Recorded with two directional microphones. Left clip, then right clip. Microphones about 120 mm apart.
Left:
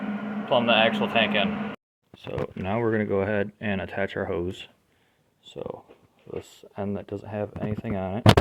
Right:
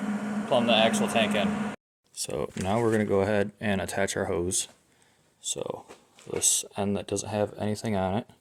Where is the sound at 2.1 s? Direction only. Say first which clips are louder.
Even; 45° right (ahead or behind).